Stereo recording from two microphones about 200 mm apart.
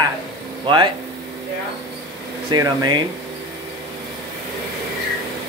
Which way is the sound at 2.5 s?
20° right (ahead or behind).